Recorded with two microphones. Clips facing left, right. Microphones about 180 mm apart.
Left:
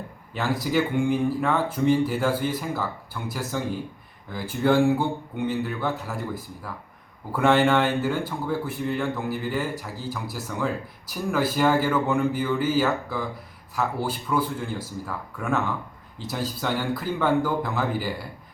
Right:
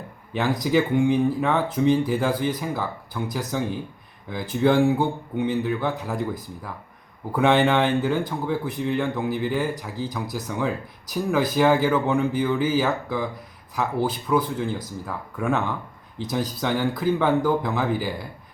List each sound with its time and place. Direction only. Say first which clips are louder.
0.3 s speech: right 3 dB; 15° right (ahead or behind)